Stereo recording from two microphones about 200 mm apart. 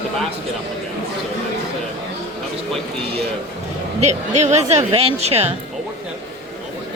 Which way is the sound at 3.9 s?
35° right (ahead or behind).